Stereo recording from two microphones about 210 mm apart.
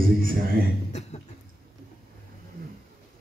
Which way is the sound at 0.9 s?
30° left (ahead or behind).